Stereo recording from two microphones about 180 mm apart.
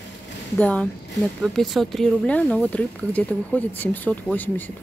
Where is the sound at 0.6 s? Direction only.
5° left (ahead or behind).